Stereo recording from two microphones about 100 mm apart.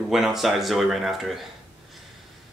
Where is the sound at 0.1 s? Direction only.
5° right (ahead or behind).